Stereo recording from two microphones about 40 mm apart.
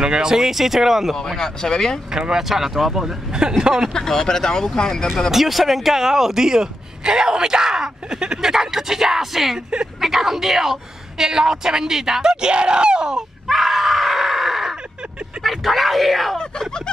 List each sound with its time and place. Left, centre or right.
0.0 s speech: centre
1.4 s speech: centre
2.0 s speech: centre
3.3 s speech: centre
3.9 s speech: centre
5.3 s speech: centre
13.5 s screaming: centre
15.4 s speech: centre
16.3 s speech: centre